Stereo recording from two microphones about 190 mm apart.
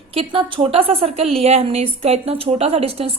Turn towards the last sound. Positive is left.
turn(degrees=-30)  # may be behind; listen again after turning